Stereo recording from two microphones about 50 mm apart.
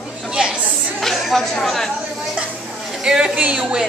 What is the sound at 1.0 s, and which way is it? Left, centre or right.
Speech, centre.